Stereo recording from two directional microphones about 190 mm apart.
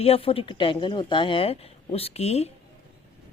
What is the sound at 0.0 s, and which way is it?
Speech, 30° left (ahead or behind).